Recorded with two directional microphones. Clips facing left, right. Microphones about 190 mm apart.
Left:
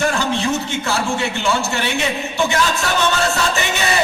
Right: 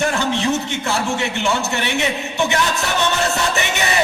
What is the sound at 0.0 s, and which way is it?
A man's voice, 20° right (ahead or behind).